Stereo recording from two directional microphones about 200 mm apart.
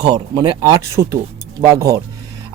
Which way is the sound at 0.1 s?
20° right (ahead or behind).